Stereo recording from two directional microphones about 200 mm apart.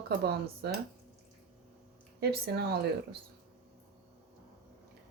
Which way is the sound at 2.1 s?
55° right (ahead or behind).